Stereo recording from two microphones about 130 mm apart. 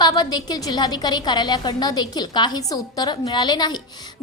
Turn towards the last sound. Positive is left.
turn(degrees=35)  # may be behind; listen again after turning